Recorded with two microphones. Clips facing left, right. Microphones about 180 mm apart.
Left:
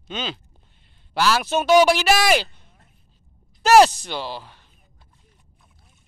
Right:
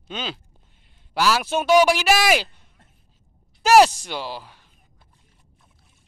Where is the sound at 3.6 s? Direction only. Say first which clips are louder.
Left 1 dB; 10° right (ahead or behind).